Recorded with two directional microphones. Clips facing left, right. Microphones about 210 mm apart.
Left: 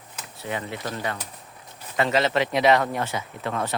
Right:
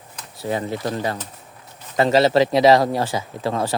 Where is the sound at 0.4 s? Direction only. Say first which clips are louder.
Right 7 dB; 35° right (ahead or behind).